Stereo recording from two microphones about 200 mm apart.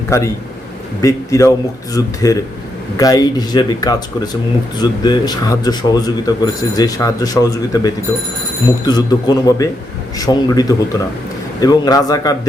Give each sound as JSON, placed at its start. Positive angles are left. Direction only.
{"t": 0.1, "sound": "speech", "side_deg": 15}